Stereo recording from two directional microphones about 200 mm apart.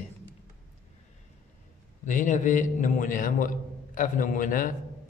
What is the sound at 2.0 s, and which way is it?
A man's voice, 40° left (ahead or behind).